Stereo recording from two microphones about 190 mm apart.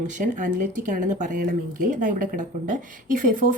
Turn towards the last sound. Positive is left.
turn(degrees=-45)  # may be behind; listen again after turning